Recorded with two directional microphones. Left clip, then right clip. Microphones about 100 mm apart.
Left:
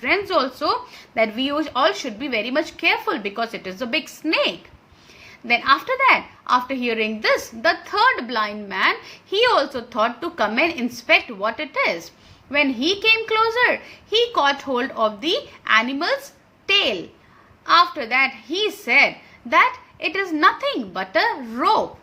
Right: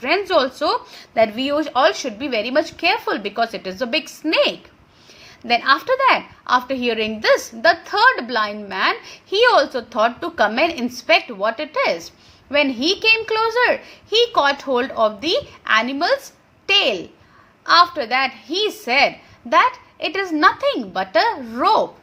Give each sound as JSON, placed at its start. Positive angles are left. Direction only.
{"t": 0.0, "sound": "a woman's voice", "side_deg": -40}